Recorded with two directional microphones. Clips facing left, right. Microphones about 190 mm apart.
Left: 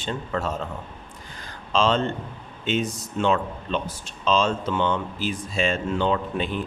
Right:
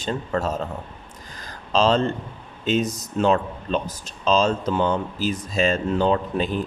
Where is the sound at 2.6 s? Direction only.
40° right (ahead or behind).